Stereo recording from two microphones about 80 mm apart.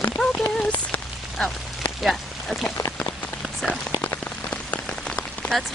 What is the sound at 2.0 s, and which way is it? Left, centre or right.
Speech, centre.